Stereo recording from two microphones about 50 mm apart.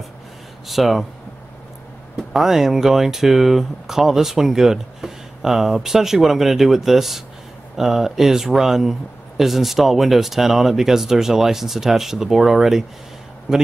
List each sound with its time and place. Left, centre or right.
0.7 s speech: centre
2.1 s speech: centre